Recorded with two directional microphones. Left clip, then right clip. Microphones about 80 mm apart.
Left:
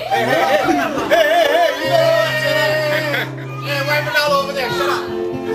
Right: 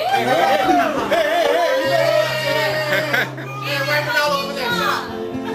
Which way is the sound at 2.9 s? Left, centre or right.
Centre.